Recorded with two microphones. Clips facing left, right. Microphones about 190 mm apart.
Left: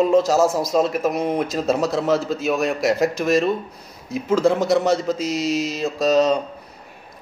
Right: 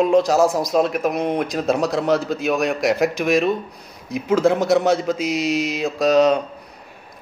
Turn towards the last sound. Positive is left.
turn(degrees=0)  # may be behind; listen again after turning